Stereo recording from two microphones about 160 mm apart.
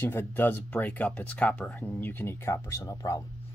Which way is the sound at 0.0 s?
15° left (ahead or behind).